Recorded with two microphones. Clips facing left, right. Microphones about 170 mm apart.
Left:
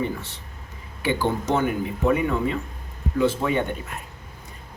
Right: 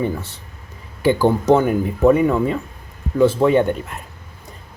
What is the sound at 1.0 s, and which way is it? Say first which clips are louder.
Speech: right 9 dB; 40° right (ahead or behind).